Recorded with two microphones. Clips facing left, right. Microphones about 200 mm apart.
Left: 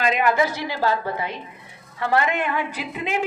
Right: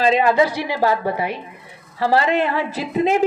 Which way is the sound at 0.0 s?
30° right (ahead or behind).